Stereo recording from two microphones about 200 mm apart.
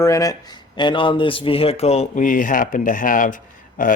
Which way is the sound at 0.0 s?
15° left (ahead or behind).